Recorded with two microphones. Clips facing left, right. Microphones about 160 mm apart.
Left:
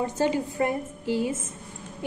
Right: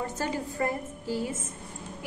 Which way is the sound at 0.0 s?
20° left (ahead or behind).